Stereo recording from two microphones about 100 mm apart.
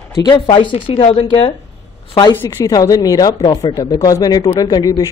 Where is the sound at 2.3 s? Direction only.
25° left (ahead or behind).